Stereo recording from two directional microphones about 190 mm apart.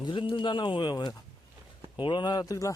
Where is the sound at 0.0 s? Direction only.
25° left (ahead or behind).